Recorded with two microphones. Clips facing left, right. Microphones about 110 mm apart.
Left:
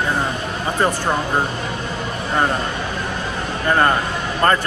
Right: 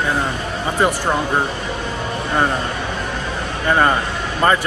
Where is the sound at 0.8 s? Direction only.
10° right (ahead or behind).